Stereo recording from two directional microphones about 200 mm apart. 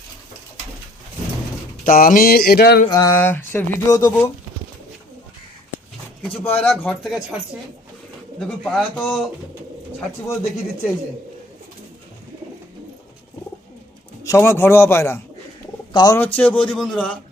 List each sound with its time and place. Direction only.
1.8 s speech: 45° left (ahead or behind)
2.9 s speech: 15° left (ahead or behind)
6.6 s speech: 5° left (ahead or behind)
8.4 s speech: 5° left (ahead or behind)
14.3 s speech: 15° left (ahead or behind)
16.1 s speech: 10° left (ahead or behind)